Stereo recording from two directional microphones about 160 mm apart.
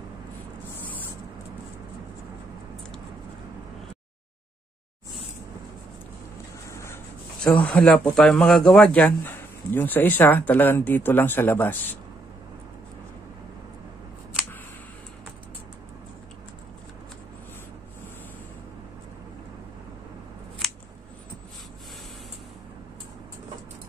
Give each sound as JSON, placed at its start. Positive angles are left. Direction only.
{"t": 6.7, "sound": "a sound", "side_deg": 15}
{"t": 7.4, "sound": "speech", "side_deg": 5}
{"t": 20.6, "sound": "scissors", "side_deg": 0}